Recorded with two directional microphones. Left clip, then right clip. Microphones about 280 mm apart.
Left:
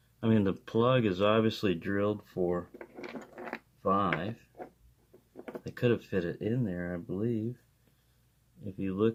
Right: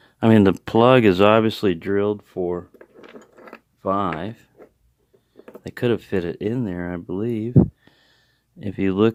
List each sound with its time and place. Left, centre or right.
0.2 s speech: right
3.8 s speech: right
5.6 s speech: right
8.6 s speech: right